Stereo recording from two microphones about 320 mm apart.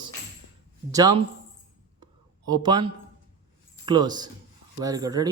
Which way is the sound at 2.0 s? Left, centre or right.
Centre.